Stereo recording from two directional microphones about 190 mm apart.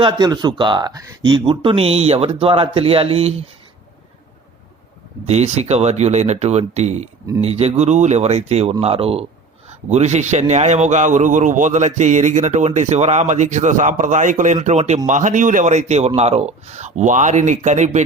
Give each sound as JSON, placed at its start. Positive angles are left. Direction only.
{"t": 0.0, "sound": "speech", "side_deg": -20}
{"t": 5.2, "sound": "a man's voice", "side_deg": -35}